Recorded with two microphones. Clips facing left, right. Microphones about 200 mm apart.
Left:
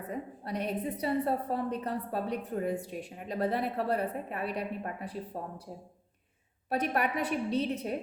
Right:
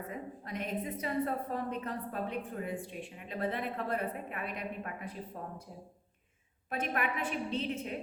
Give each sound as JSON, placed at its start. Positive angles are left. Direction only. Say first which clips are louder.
{"t": 0.1, "sound": "a woman's voice", "louder": "left 4 dB", "side_deg": 35}
{"t": 6.7, "sound": "a woman's voice", "louder": "left 4 dB", "side_deg": 35}